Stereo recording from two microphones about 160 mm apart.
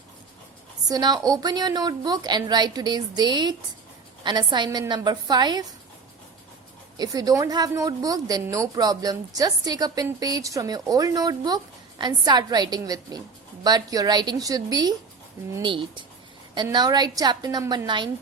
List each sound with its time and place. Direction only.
0.9 s a woman's voice: 25° right (ahead or behind)
6.9 s a woman's voice: 25° right (ahead or behind)